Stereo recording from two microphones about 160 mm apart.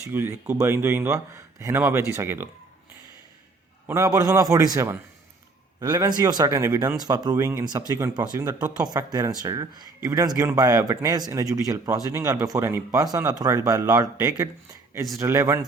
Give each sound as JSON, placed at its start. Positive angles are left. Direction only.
{"t": 0.1, "sound": "speech", "side_deg": -15}
{"t": 3.8, "sound": "speech", "side_deg": -20}